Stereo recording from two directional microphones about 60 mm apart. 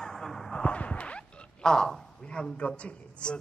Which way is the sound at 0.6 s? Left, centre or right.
Left.